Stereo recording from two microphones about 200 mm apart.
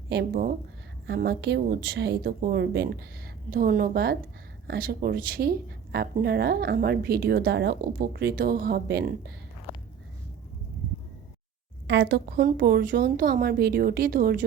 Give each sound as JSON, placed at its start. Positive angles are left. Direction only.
{"t": 0.1, "sound": "speech", "side_deg": -50}
{"t": 11.9, "sound": "speech", "side_deg": -60}